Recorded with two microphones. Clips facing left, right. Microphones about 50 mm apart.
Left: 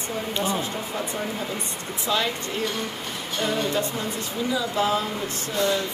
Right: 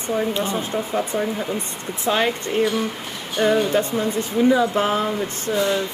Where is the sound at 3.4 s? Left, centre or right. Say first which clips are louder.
Right 7 dB; right.